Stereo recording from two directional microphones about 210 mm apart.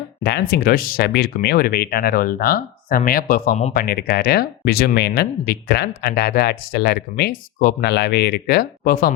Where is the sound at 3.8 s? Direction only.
50° left (ahead or behind).